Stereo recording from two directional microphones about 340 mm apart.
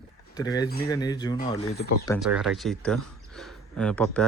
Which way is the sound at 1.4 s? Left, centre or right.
Left.